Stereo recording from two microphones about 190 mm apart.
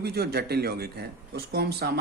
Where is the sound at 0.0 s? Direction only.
55° right (ahead or behind).